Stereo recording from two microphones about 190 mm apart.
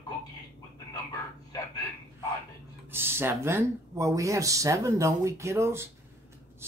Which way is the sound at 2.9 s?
10° right (ahead or behind).